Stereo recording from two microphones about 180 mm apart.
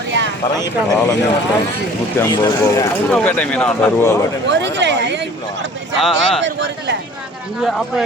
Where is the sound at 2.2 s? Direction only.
20° left (ahead or behind).